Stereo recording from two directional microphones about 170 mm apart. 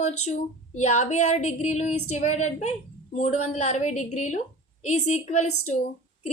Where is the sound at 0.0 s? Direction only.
45° left (ahead or behind).